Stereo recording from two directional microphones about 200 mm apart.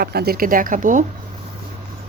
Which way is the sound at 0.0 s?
50° right (ahead or behind).